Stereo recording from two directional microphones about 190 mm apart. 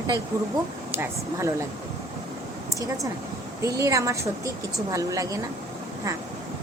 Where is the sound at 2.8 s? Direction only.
15° right (ahead or behind).